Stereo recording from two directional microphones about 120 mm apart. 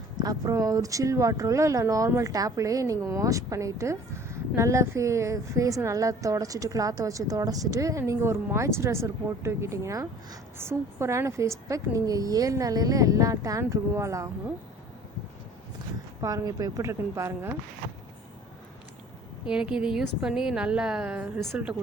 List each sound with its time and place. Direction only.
0.2 s speech: 35° right (ahead or behind)
16.2 s speech: 30° right (ahead or behind)
19.5 s a woman's voice: 5° right (ahead or behind)